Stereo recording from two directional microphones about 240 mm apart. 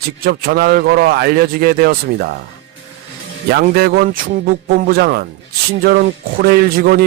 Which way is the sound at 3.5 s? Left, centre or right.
Right.